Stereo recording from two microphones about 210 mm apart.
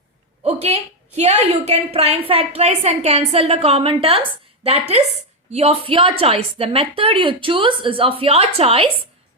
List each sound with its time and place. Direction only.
0.4 s a woman's voice: 30° right (ahead or behind)